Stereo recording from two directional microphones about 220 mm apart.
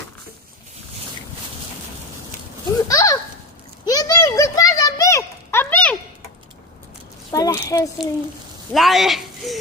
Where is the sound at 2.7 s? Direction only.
15° left (ahead or behind).